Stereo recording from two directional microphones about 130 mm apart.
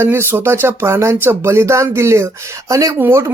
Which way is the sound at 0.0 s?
15° right (ahead or behind).